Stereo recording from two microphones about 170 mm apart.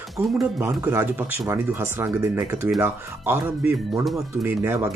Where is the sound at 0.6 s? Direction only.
15° right (ahead or behind).